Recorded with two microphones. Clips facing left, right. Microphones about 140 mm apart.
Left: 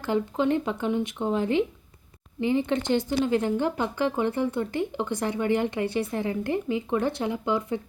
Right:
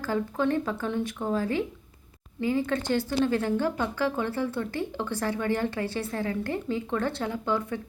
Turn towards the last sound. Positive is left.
turn(degrees=15)  # may be behind; listen again after turning